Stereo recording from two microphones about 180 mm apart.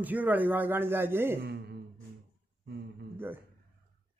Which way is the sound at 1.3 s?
65° right (ahead or behind).